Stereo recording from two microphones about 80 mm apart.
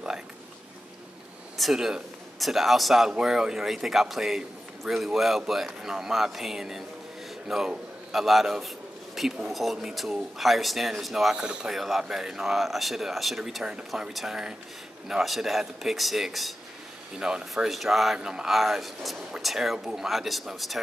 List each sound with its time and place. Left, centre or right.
1.6 s a man's voice: centre